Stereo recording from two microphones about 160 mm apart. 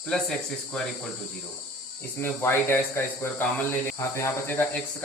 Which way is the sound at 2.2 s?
15° left (ahead or behind).